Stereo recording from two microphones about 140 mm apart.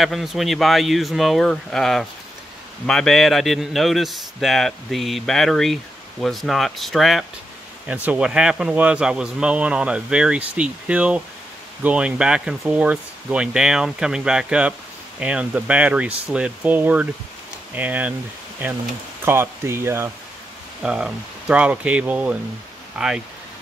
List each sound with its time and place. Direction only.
0.0 s a man's voice: centre (ahead or behind)
19.2 s a man's voice: 15° right (ahead or behind)
20.8 s a man's voice: 5° right (ahead or behind)